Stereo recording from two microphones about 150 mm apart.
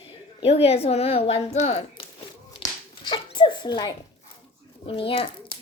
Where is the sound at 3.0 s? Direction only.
30° left (ahead or behind).